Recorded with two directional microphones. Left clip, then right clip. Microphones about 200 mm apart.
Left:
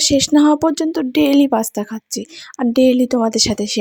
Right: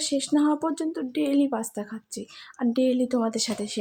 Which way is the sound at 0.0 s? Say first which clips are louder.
Left 11 dB; 45° left (ahead or behind).